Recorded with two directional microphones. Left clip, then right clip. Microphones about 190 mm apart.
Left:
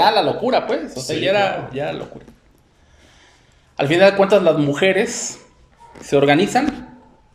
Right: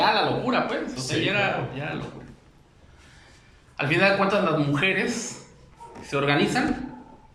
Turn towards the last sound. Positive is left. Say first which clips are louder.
# left 8 dB
turn(degrees=40)  # may be behind; listen again after turning